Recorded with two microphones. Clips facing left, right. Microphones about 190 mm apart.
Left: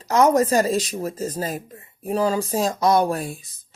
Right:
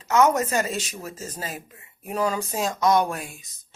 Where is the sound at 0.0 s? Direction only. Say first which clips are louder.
Left 3 dB; 35° left (ahead or behind).